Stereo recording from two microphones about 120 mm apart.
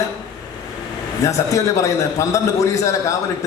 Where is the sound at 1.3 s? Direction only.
25° left (ahead or behind).